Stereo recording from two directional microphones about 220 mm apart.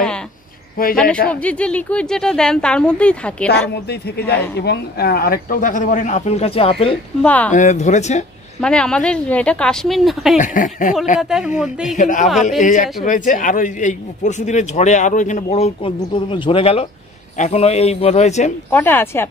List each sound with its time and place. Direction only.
0.9 s a woman's voice: 5° left (ahead or behind)
3.9 s a man's voice: 50° left (ahead or behind); by 7.0 s 25° left (ahead or behind)
7.2 s speech: 5° left (ahead or behind)
7.5 s a man's voice: 35° left (ahead or behind)
8.5 s a woman's voice: 5° left (ahead or behind)
10.3 s a man's voice: 35° left (ahead or behind)
11.1 s a woman's voice: 5° right (ahead or behind)
12.0 s a man's voice: 35° left (ahead or behind)
18.7 s speech: 10° left (ahead or behind)